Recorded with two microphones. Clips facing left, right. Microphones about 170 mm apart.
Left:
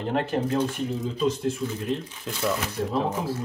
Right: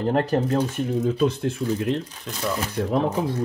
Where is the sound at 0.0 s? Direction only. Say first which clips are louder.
Right 4 dB; 40° right (ahead or behind).